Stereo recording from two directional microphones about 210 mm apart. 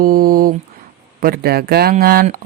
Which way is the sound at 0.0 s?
45° right (ahead or behind).